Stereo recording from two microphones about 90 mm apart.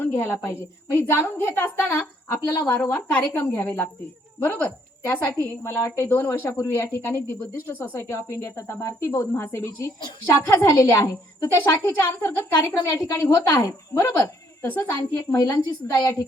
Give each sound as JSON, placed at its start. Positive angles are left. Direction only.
{"t": 0.0, "sound": "cricket", "side_deg": 25}
{"t": 0.9, "sound": "a woman's voice", "side_deg": 25}
{"t": 2.3, "sound": "speech", "side_deg": 40}
{"t": 2.7, "sound": "a woman's voice", "side_deg": 25}
{"t": 14.7, "sound": "a woman's voice", "side_deg": 20}
{"t": 15.3, "sound": "speech", "side_deg": 30}
{"t": 15.5, "sound": "a woman's voice", "side_deg": 45}